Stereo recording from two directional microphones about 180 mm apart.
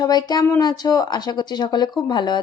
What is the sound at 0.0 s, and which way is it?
A woman's voice, 25° left (ahead or behind).